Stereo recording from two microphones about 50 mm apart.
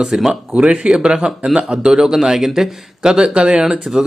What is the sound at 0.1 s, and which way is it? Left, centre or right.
Speech, centre.